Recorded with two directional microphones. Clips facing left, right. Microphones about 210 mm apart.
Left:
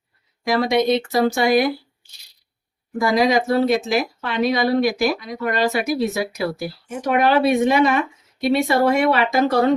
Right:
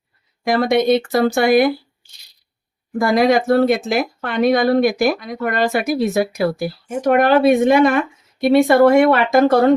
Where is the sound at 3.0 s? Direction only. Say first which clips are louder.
Right 3 dB; 55° right (ahead or behind).